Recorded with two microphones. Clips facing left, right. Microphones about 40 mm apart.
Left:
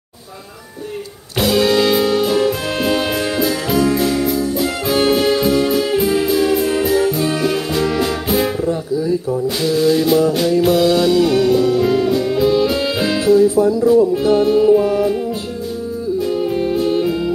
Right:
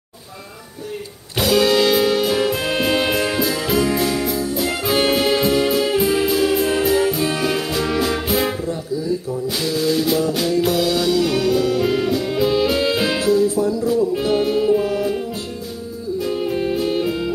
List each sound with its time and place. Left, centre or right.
1.4 s music: centre
9.6 s music: centre
13.2 s music: centre
14.1 s music: centre
16.3 s music: centre